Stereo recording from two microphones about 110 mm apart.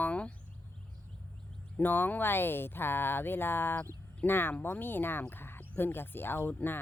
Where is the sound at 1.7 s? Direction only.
20° left (ahead or behind).